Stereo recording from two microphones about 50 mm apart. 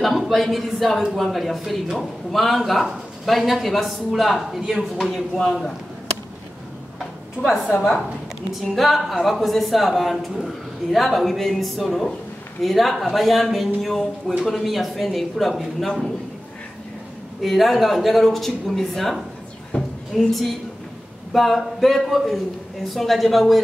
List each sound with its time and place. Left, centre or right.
0.0 s speech: centre
7.4 s speech: centre
17.4 s speech: centre
19.7 s a woman's voice: left
20.2 s speech: centre